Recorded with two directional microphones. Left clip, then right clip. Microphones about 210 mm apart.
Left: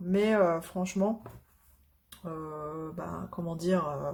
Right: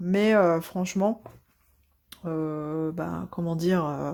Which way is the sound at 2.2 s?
40° right (ahead or behind).